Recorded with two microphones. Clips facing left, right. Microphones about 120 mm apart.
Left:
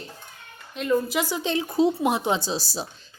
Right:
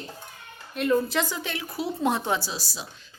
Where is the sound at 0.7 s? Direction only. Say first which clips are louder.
Even; centre (ahead or behind).